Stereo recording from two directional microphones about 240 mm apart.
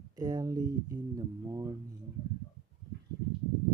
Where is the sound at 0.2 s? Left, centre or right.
Centre.